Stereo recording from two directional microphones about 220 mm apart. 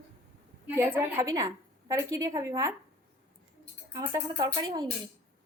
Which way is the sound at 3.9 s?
15° right (ahead or behind).